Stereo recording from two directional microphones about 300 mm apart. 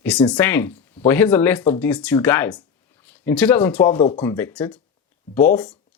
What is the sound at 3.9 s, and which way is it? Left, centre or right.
Speech, centre.